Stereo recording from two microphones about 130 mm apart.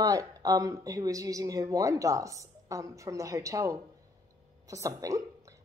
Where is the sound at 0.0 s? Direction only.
25° right (ahead or behind).